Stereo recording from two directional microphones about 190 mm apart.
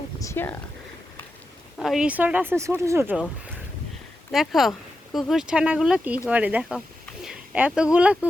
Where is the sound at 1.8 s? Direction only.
Centre (ahead or behind).